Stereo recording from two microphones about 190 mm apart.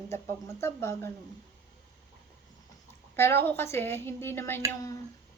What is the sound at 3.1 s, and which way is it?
Speech, 10° left (ahead or behind).